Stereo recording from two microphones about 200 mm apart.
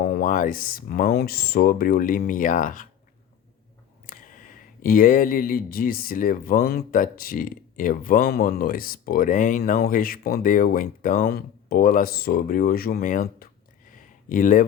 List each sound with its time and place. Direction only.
0.0 s speech: 45° left (ahead or behind)
4.0 s speech: 45° left (ahead or behind)
13.9 s a sound: 40° left (ahead or behind)